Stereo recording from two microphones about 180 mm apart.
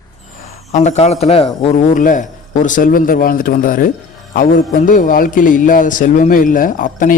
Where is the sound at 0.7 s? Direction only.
40° left (ahead or behind).